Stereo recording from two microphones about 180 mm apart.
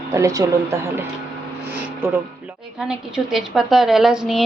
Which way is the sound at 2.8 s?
Centre (ahead or behind).